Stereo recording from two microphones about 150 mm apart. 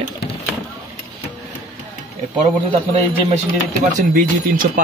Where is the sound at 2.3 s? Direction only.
40° right (ahead or behind).